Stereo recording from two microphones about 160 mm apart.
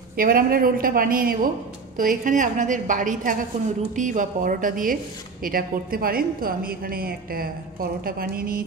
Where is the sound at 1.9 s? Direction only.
55° right (ahead or behind).